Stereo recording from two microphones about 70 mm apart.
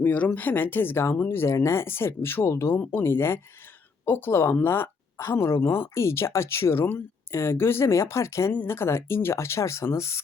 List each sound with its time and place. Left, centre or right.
0.0 s speech: left
2.7 s speech: left